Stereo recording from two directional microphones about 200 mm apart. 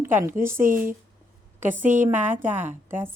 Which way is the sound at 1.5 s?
10° right (ahead or behind).